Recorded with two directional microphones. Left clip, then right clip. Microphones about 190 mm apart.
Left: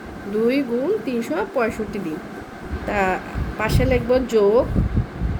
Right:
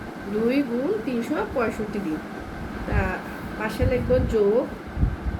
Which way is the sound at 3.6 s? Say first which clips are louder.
Left 5 dB; 65° left (ahead or behind).